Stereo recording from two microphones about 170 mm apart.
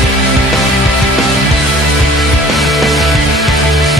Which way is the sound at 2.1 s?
Centre (ahead or behind).